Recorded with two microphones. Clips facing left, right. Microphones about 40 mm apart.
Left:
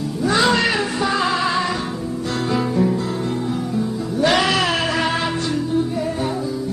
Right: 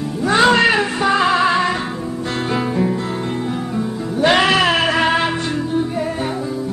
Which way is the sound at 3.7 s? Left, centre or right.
Right.